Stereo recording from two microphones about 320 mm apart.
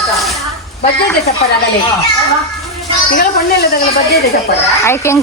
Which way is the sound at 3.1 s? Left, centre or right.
Left.